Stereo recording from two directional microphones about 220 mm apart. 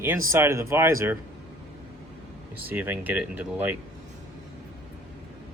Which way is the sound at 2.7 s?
10° right (ahead or behind).